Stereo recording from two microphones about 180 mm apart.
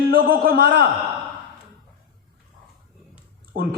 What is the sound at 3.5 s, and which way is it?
Speech, 55° right (ahead or behind).